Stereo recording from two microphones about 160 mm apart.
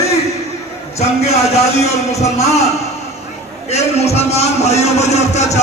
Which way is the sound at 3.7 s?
40° left (ahead or behind).